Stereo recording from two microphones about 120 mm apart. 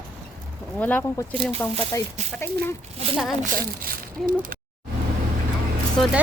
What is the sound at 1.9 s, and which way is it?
Speech, 25° left (ahead or behind).